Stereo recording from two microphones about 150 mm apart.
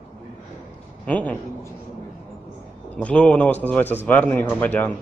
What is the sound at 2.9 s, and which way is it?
A man's voice, 10° left (ahead or behind).